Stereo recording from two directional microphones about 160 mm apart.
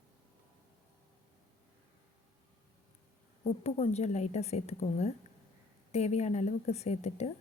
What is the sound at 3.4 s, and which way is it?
A woman's voice, 40° left (ahead or behind).